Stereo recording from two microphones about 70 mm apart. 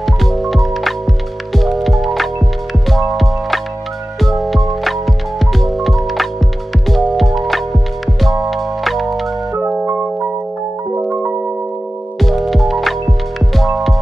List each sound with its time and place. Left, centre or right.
0.0 s music: centre
10.9 s music: right
12.2 s music: centre